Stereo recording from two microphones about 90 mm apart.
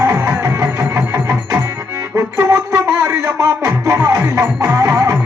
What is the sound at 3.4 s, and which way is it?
Music, 35° right (ahead or behind).